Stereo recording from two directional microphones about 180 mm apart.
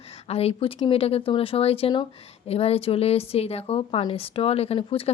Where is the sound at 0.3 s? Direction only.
35° left (ahead or behind).